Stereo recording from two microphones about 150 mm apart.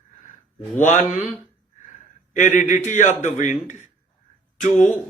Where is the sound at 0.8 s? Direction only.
55° left (ahead or behind).